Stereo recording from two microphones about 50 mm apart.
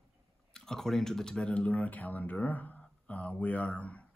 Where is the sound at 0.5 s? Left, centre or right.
Centre.